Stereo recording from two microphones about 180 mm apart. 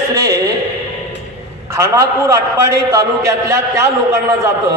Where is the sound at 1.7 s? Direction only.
15° right (ahead or behind).